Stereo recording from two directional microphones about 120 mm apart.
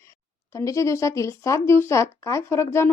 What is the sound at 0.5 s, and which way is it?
A woman's voice, 25° left (ahead or behind).